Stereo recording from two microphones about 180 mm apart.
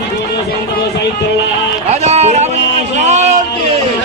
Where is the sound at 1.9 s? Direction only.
35° right (ahead or behind).